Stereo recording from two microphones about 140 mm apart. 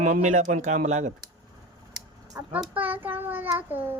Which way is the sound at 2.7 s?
10° right (ahead or behind).